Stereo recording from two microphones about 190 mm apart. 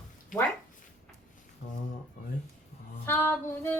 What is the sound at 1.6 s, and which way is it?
Speech, 40° left (ahead or behind).